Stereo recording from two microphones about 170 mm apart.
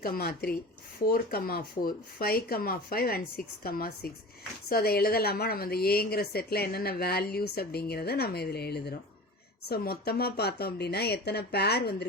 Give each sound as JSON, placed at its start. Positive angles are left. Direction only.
{"t": 0.0, "sound": "a woman's voice", "side_deg": 60}